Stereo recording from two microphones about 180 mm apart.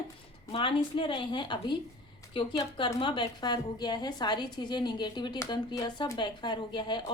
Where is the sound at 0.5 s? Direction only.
30° left (ahead or behind).